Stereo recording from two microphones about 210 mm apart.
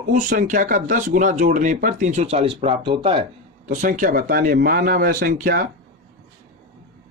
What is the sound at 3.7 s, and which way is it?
Speech, 40° right (ahead or behind).